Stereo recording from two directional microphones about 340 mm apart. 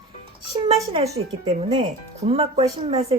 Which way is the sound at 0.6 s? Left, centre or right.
Centre.